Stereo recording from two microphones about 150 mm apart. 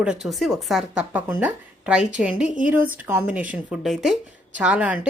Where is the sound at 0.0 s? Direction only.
5° right (ahead or behind).